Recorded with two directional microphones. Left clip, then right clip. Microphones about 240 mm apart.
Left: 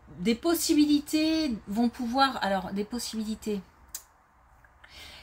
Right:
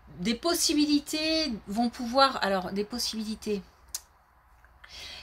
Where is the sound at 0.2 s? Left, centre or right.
Right.